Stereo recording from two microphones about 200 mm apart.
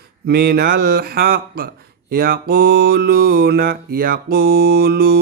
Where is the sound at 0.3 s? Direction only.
50° right (ahead or behind).